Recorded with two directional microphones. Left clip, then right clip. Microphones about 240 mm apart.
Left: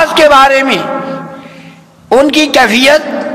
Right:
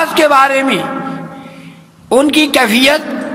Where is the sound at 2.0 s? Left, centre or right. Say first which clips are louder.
Left 3 dB; right.